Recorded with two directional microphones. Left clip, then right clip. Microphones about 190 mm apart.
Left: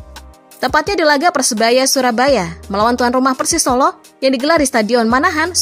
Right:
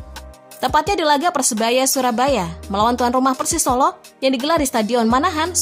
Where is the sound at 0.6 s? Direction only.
15° left (ahead or behind).